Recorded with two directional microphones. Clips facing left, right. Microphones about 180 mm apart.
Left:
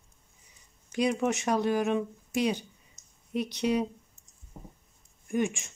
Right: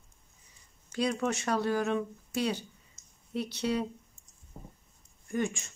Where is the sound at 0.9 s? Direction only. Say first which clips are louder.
Left 3 dB; 15° left (ahead or behind).